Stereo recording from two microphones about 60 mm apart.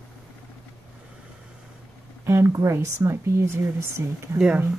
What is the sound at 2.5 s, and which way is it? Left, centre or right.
Speech, right.